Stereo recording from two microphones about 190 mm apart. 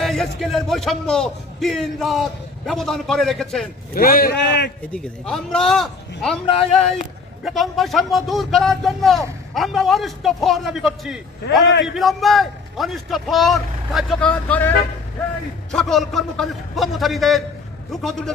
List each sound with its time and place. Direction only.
0.0 s speech: centre (ahead or behind)
3.9 s a man's voice: 50° left (ahead or behind)
4.9 s speech: 5° left (ahead or behind)
6.4 s speech: 30° left (ahead or behind)
7.4 s speech: centre (ahead or behind)
11.6 s a man's voice: 70° left (ahead or behind)
11.9 s speech: centre (ahead or behind)
15.7 s speech: centre (ahead or behind)